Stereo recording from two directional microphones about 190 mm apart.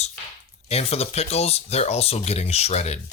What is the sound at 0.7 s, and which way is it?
Speech, 35° left (ahead or behind).